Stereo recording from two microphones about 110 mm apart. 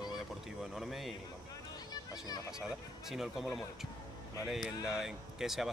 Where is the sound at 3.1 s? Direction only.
5° right (ahead or behind).